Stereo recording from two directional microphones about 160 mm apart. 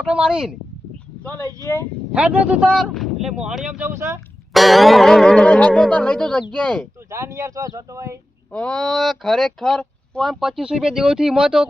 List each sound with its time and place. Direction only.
0.0 s speech: 5° right (ahead or behind)
1.5 s speech: 15° left (ahead or behind)
2.1 s speech: 5° right (ahead or behind)
4.5 s speech: centre (ahead or behind)
7.1 s speech: 20° right (ahead or behind)
8.5 s speech: 5° left (ahead or behind)